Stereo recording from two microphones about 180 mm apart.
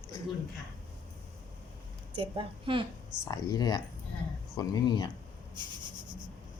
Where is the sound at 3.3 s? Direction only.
20° left (ahead or behind).